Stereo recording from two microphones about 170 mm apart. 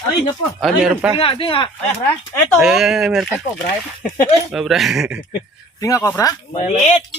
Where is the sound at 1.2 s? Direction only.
30° left (ahead or behind).